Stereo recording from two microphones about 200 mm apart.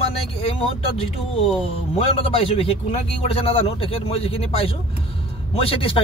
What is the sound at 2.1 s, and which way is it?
A man's voice, 30° left (ahead or behind).